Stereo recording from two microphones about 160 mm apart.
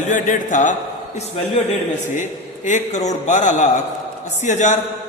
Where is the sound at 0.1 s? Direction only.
50° left (ahead or behind).